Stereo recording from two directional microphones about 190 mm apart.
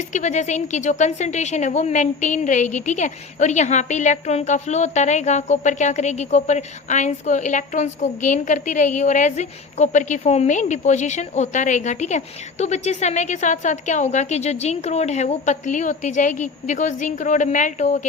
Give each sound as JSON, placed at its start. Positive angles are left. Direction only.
{"t": 0.1, "sound": "speech", "side_deg": 40}